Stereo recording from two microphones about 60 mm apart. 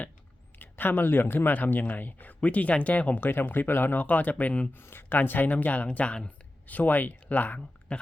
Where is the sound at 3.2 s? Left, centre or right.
Left.